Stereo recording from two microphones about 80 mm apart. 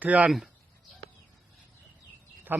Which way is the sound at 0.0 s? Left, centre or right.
Centre.